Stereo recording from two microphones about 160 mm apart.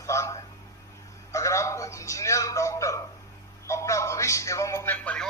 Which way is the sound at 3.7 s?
20° left (ahead or behind).